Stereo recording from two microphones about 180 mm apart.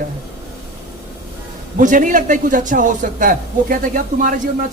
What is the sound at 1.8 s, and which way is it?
Speech, 45° right (ahead or behind).